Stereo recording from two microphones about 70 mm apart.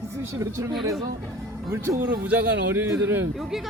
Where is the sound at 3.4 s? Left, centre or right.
Centre.